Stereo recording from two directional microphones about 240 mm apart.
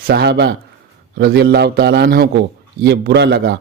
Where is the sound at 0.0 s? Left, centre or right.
Right.